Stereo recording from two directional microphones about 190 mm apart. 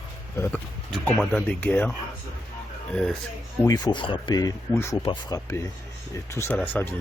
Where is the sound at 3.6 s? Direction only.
20° left (ahead or behind).